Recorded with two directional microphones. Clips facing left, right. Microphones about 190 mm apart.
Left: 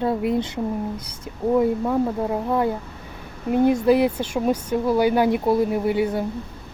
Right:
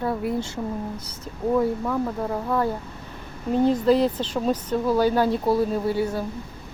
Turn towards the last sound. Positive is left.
turn(degrees=20)  # may be behind; listen again after turning